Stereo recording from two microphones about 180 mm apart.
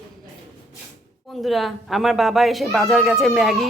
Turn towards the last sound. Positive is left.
turn(degrees=0)  # may be behind; listen again after turning